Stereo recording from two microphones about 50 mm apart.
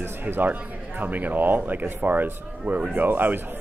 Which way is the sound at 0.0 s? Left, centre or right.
Right.